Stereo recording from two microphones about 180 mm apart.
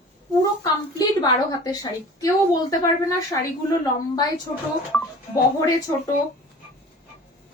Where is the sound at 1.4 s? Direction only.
20° left (ahead or behind).